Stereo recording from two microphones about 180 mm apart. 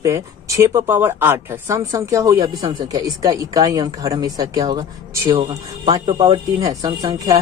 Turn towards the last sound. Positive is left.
turn(degrees=-20)  # may be behind; listen again after turning